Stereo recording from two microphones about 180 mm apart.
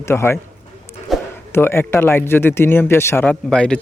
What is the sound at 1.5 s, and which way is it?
Speech, 10° left (ahead or behind).